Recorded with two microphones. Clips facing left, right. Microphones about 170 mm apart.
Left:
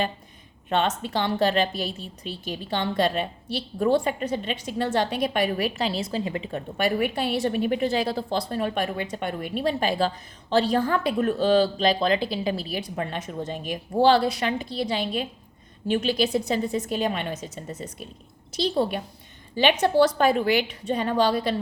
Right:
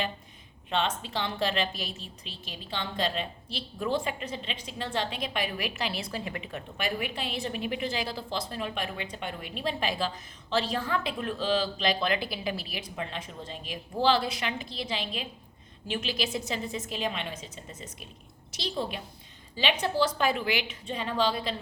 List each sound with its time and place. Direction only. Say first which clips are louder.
0.7 s a woman's voice: left 5 dB; 50° left (ahead or behind)
5.5 s a woman's voice: left 7 dB; 35° left (ahead or behind)
7.0 s a woman's voice: left 9 dB; 50° left (ahead or behind); by 12.8 s 30° left (ahead or behind)
13.0 s a woman's voice: left 5 dB; 45° left (ahead or behind)
19.5 s a woman's voice: left 8 dB; 70° left (ahead or behind)
20.1 s a woman's voice: left 7 dB; 45° left (ahead or behind)